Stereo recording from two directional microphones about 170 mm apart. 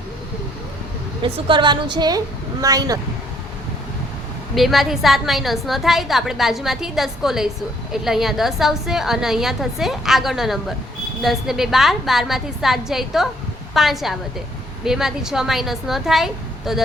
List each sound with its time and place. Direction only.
1.2 s a woman's voice: 30° right (ahead or behind)
4.5 s a woman's voice: centre (ahead or behind)